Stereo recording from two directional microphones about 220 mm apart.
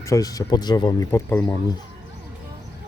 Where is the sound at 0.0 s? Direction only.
15° left (ahead or behind).